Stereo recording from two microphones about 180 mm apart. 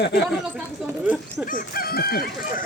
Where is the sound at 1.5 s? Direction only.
55° left (ahead or behind).